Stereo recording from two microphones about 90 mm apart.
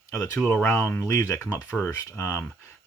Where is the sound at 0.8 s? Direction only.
35° left (ahead or behind).